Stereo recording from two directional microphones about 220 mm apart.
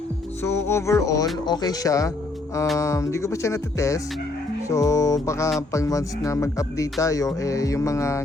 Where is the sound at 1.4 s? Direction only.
20° left (ahead or behind).